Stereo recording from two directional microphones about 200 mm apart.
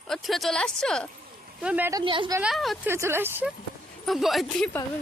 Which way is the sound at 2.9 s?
10° right (ahead or behind).